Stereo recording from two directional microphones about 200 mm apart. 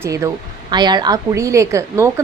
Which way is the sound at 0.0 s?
15° right (ahead or behind).